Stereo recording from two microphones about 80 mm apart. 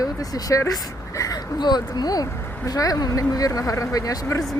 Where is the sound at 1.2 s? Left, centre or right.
Left.